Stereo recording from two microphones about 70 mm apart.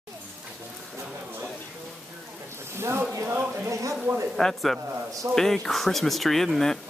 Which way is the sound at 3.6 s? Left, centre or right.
Right.